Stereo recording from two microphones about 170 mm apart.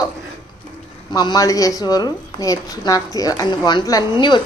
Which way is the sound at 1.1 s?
25° left (ahead or behind).